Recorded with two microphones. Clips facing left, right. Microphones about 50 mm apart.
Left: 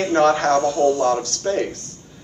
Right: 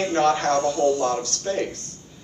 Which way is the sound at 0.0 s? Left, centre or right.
Left.